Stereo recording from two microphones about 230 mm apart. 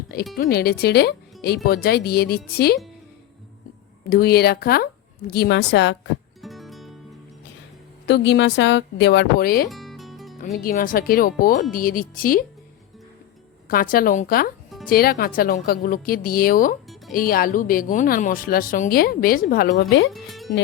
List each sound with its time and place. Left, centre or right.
0.3 s speech: left
4.1 s speech: left
6.4 s music: centre
8.0 s speech: left
9.6 s music: centre
10.6 s a woman's voice: left
13.7 s a woman's voice: left
20.1 s speech: centre